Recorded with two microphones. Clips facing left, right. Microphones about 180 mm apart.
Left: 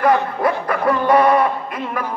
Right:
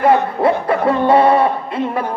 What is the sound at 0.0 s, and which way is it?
A man's voice, 25° right (ahead or behind).